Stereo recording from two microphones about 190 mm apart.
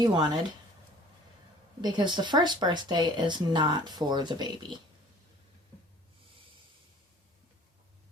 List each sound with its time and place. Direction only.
0.0 s speech: 20° right (ahead or behind)
1.8 s speech: 25° right (ahead or behind)